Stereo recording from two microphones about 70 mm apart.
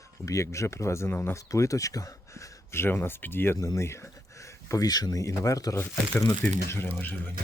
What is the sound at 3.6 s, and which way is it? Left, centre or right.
Speech, left.